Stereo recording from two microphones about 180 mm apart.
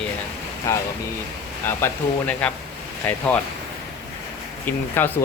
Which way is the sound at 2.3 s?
5° left (ahead or behind).